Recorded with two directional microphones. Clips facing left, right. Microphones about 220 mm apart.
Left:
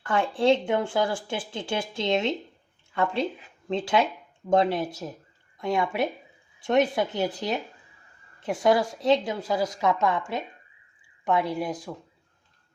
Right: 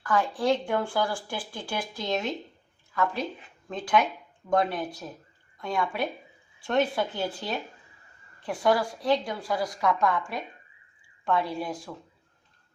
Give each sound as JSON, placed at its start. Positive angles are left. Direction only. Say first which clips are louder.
{"t": 0.0, "sound": "speech", "louder": "left 3 dB", "side_deg": 25}